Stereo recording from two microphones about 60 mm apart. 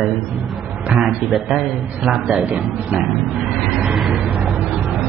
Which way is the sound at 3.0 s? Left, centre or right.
Centre.